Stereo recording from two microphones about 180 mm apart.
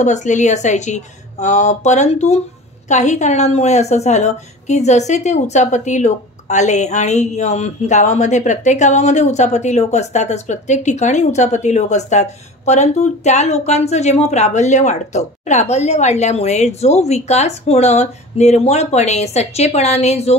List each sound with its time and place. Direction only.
0.0 s a woman's voice: 40° left (ahead or behind)